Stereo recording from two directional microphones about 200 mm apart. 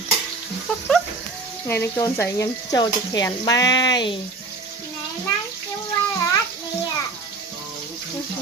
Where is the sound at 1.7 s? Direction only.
15° left (ahead or behind).